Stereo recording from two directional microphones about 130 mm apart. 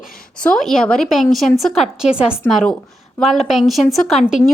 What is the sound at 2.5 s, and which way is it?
A woman's voice, 5° left (ahead or behind).